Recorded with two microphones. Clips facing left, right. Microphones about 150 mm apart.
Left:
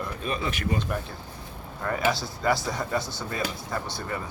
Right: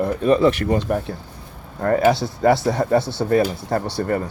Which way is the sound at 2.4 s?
60° right (ahead or behind).